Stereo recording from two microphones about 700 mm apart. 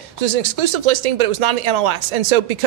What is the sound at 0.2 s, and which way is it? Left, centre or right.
Speech, right.